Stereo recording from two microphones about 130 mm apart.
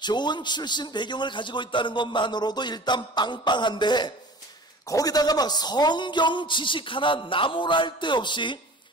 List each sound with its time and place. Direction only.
0.0 s a man's voice: 35° left (ahead or behind)